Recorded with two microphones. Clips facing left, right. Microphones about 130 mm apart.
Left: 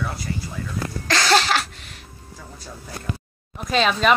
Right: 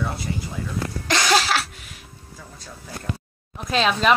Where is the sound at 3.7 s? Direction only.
Centre (ahead or behind).